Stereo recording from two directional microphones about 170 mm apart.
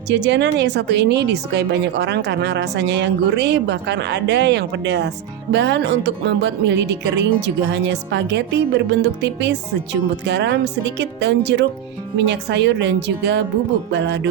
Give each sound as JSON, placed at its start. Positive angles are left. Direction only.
{"t": 0.1, "sound": "speech", "side_deg": -90}